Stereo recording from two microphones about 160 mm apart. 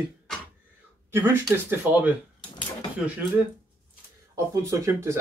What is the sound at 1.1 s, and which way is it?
Speech, 15° right (ahead or behind).